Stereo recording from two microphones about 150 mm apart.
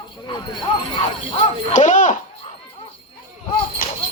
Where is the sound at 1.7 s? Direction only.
55° left (ahead or behind).